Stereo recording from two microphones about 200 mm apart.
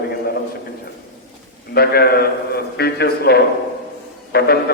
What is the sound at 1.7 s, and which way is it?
A man's voice, 50° left (ahead or behind).